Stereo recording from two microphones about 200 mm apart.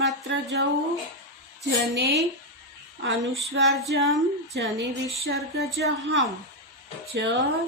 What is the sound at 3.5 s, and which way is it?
A woman's voice, 65° right (ahead or behind).